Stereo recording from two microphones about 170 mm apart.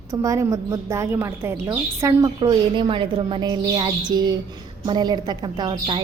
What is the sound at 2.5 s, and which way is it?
A woman's voice, 30° right (ahead or behind).